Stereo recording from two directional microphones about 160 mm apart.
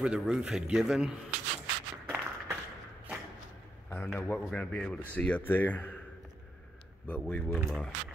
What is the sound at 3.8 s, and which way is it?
A man's voice, 10° left (ahead or behind).